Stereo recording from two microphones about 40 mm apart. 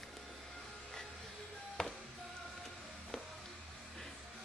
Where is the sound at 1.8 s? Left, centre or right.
Centre.